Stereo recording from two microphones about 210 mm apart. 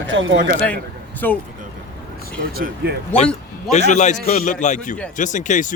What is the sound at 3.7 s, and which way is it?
Speech, 35° left (ahead or behind).